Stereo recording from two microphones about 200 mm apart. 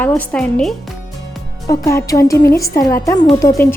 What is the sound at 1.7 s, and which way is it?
Speech, 15° left (ahead or behind).